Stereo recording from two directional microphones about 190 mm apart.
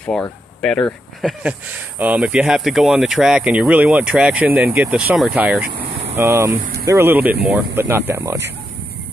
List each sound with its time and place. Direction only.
0.1 s speech: 5° left (ahead or behind)
2.0 s speech: 5° right (ahead or behind)